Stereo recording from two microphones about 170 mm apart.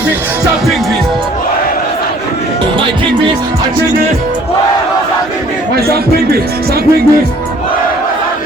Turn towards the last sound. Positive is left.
turn(degrees=-65)  # may be behind; listen again after turning